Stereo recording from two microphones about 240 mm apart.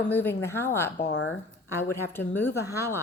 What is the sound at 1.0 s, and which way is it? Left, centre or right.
Speech, left.